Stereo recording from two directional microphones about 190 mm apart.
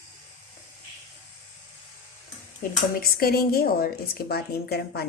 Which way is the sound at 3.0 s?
55° left (ahead or behind).